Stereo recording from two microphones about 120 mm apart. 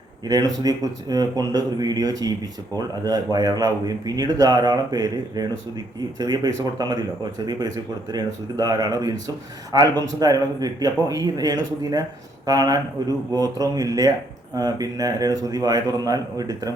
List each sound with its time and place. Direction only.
0.3 s speech: 30° right (ahead or behind)
8.1 s speech: 35° right (ahead or behind)